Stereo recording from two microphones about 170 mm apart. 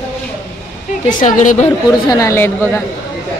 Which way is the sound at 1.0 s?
45° left (ahead or behind).